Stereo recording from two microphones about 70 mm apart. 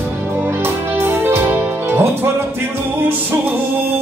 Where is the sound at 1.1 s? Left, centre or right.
Right.